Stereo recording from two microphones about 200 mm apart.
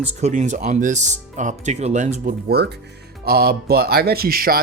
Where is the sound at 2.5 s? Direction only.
55° right (ahead or behind).